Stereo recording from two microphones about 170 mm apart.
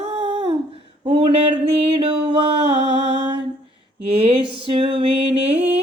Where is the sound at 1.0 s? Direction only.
30° right (ahead or behind).